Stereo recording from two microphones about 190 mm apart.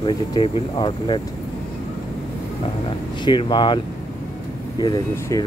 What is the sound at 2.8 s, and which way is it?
Speech, 25° left (ahead or behind).